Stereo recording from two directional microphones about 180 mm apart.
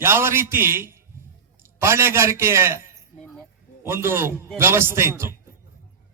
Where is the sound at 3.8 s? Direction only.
15° right (ahead or behind).